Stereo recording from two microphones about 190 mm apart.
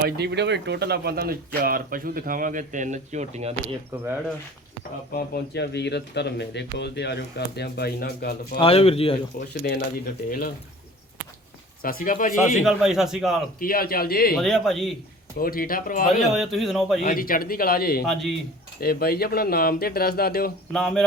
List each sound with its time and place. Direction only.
0.0 s speech: 60° right (ahead or behind); by 3.5 s 35° right (ahead or behind)
5.1 s speech: 60° left (ahead or behind)
8.5 s speech: 30° left (ahead or behind)
9.5 s speech: 55° left (ahead or behind)
11.8 s speech: 50° left (ahead or behind)
12.6 s a man's voice: 5° right (ahead or behind)
13.6 s speech: 50° left (ahead or behind)
14.3 s a man's voice: centre (ahead or behind)
15.4 s speech: 50° left (ahead or behind)
16.3 s a man's voice: centre (ahead or behind)
17.0 s speech: 45° left (ahead or behind)
18.0 s a man's voice: centre (ahead or behind)
18.8 s speech: 55° left (ahead or behind)
20.7 s a man's voice: centre (ahead or behind)